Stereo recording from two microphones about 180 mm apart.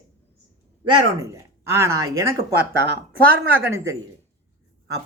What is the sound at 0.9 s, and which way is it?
Speech, 15° right (ahead or behind).